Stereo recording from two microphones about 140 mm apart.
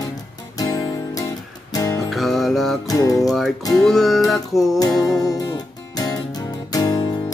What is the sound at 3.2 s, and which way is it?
Music, centre (ahead or behind).